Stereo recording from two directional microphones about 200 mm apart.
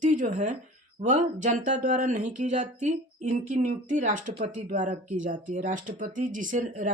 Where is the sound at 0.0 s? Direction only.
40° right (ahead or behind).